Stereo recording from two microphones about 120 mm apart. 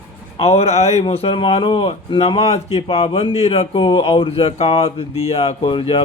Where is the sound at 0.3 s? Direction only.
60° left (ahead or behind).